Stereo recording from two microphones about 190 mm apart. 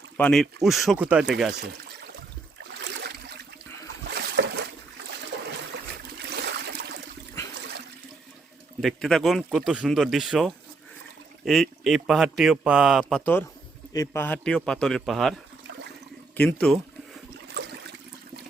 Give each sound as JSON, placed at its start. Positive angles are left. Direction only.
{"t": 0.2, "sound": "speech", "side_deg": 5}
{"t": 2.8, "sound": "boat", "side_deg": -65}
{"t": 4.1, "sound": "boat", "side_deg": -60}
{"t": 6.1, "sound": "a sound", "side_deg": -60}
{"t": 8.8, "sound": "speech", "side_deg": 0}
{"t": 16.4, "sound": "speech", "side_deg": 5}
{"t": 17.6, "sound": "a sound", "side_deg": -60}